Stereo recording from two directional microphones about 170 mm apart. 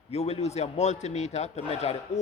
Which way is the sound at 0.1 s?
35° left (ahead or behind).